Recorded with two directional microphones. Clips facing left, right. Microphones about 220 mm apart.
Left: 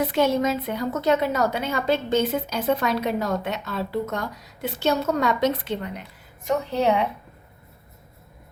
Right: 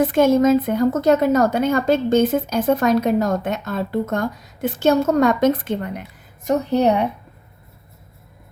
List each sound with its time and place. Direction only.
0.0 s a woman's voice: 50° right (ahead or behind)